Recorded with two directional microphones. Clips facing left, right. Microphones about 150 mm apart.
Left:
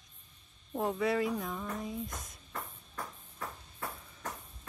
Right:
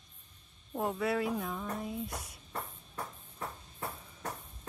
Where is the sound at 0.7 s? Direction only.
Centre (ahead or behind).